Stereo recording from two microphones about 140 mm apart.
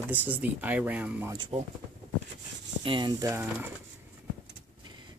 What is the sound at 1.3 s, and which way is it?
Speech, 35° right (ahead or behind).